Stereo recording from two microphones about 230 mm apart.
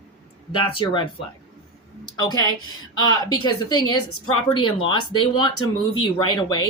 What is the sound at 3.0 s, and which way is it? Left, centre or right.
Speech, left.